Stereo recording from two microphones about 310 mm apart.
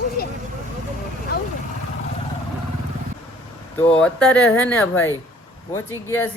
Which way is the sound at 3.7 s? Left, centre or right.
Centre.